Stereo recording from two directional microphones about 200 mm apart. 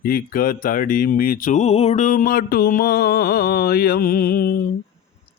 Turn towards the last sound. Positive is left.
turn(degrees=50)  # may be behind; listen again after turning